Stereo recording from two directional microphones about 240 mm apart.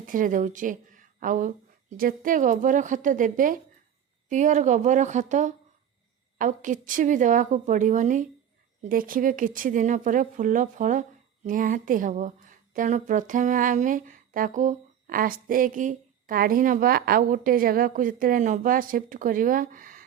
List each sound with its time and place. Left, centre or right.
0.0 s speech: right